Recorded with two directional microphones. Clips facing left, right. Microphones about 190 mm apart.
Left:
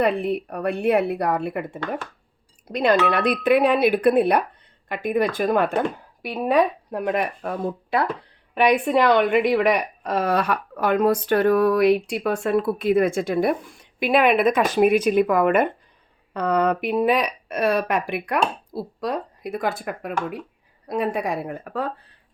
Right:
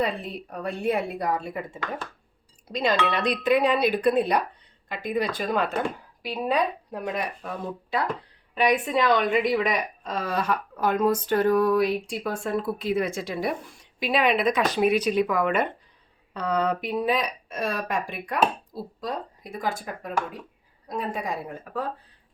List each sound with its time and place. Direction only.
0.0 s a woman's voice: 60° left (ahead or behind)